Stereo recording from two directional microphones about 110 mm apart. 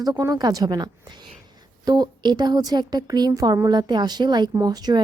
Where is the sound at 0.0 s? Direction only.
35° right (ahead or behind).